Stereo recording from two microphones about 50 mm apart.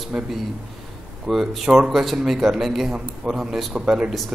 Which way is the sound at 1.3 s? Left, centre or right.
Centre.